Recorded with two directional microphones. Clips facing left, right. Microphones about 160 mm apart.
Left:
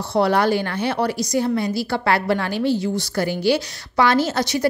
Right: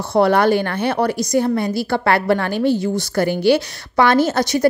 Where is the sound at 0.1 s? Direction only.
55° right (ahead or behind).